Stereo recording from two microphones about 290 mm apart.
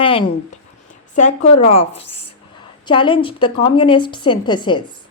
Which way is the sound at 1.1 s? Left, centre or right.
Left.